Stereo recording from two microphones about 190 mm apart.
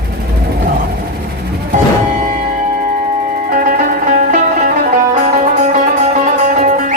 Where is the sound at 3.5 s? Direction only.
45° right (ahead or behind).